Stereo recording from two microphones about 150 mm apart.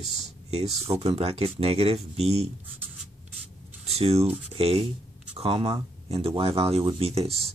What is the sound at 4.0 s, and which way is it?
Speech, 45° right (ahead or behind).